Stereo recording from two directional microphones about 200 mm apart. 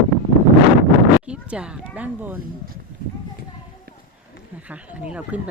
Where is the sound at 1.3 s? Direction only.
5° right (ahead or behind).